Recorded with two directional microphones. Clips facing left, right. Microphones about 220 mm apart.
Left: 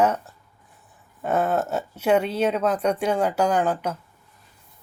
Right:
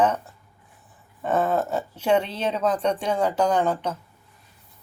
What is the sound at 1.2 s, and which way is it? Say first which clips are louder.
Speech: even; 10° left (ahead or behind).